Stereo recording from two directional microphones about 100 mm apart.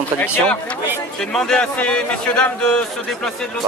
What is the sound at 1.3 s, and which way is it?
A man's voice, 5° left (ahead or behind).